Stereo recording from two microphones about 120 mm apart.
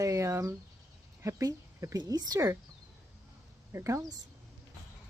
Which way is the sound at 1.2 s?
25° right (ahead or behind).